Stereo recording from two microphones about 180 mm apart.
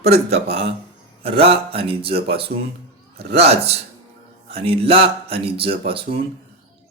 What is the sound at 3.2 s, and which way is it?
Speech, 65° right (ahead or behind).